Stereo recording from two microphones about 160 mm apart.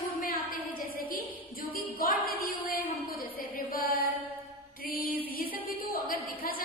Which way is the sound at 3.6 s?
65° left (ahead or behind).